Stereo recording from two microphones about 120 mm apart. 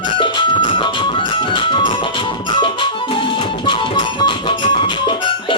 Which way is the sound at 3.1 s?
45° left (ahead or behind).